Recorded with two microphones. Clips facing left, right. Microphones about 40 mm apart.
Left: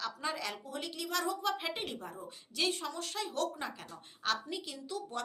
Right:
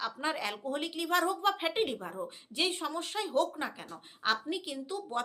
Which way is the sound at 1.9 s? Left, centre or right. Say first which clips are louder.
Right 5 dB; right.